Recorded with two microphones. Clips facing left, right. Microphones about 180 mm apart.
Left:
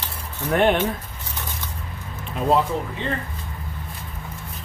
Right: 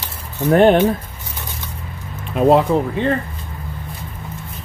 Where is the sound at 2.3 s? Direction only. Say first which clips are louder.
Right 7 dB; 70° right (ahead or behind).